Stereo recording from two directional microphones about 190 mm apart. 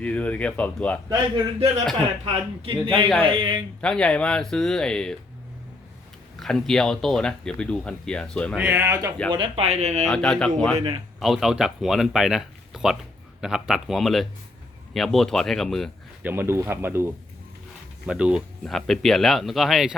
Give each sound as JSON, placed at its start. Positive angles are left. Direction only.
{"t": 0.0, "sound": "speech", "side_deg": 5}
{"t": 1.1, "sound": "a man's voice", "side_deg": -30}
{"t": 3.8, "sound": "speech", "side_deg": 5}
{"t": 6.4, "sound": "speech", "side_deg": 5}
{"t": 8.6, "sound": "speech", "side_deg": -10}
{"t": 9.3, "sound": "speech", "side_deg": -30}
{"t": 10.1, "sound": "speech", "side_deg": 5}
{"t": 16.2, "sound": "speech", "side_deg": -10}